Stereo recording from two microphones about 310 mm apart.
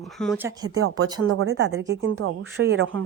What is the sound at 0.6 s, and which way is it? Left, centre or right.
Speech, right.